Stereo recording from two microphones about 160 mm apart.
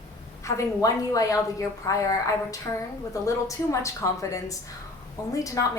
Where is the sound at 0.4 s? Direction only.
20° left (ahead or behind).